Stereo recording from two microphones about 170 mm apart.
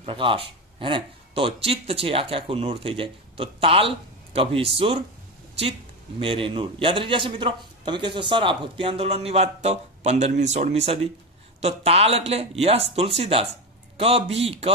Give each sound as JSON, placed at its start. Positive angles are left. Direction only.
{"t": 0.0, "sound": "a man's voice", "side_deg": -30}